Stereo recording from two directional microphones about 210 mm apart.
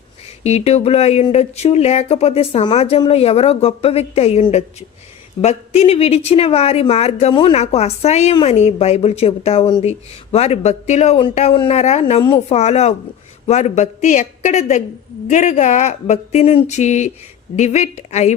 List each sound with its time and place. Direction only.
0.4 s a woman's voice: 30° left (ahead or behind)